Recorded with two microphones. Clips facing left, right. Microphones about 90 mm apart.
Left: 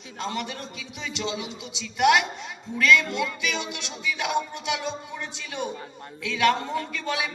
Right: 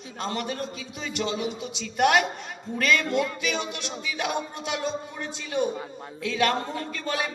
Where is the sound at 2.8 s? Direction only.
45° right (ahead or behind).